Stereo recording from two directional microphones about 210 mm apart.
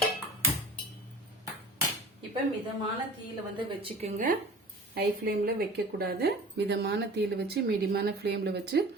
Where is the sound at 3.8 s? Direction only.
35° right (ahead or behind).